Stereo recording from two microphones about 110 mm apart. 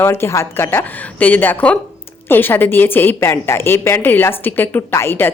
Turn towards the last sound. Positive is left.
turn(degrees=20)  # may be behind; listen again after turning